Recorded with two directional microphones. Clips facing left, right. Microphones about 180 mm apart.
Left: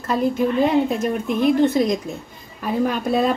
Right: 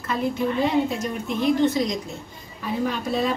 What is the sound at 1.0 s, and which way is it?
A woman's voice, 55° left (ahead or behind).